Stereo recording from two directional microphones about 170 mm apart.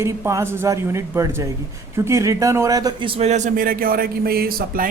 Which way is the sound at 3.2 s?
45° right (ahead or behind).